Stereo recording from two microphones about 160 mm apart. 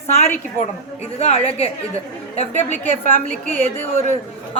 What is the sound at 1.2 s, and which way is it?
Speech, 40° left (ahead or behind).